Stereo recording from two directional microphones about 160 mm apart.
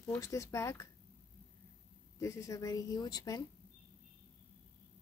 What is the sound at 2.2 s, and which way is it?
Speech, 20° left (ahead or behind).